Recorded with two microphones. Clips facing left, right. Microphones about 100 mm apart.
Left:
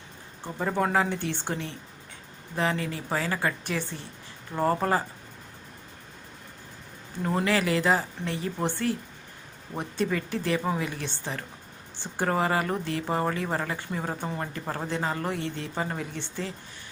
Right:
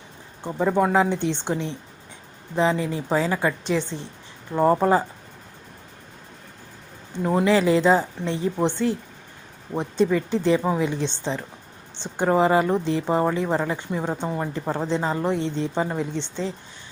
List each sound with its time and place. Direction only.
0.4 s a woman's voice: 15° right (ahead or behind)
7.3 s a woman's voice: 20° right (ahead or behind)